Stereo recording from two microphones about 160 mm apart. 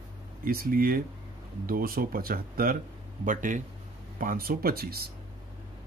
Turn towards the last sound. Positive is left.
turn(degrees=-70)  # may be behind; listen again after turning